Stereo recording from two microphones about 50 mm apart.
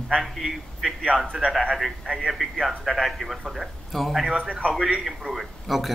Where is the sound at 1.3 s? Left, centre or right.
Centre.